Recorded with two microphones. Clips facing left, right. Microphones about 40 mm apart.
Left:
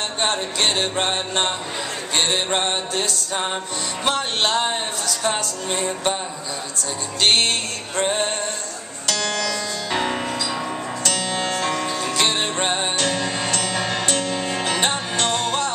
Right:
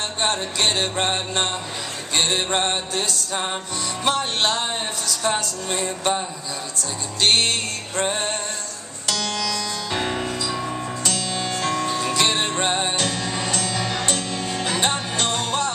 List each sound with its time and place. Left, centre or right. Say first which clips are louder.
0.2 s music: even; centre
4.0 s music: even; centre
10.5 s music: left 1 dB; left
12.1 s music: left 1 dB; centre
13.0 s music: left 2 dB; left; by 15.7 s centre